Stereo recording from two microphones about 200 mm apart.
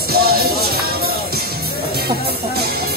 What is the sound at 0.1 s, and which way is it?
Music, 50° right (ahead or behind).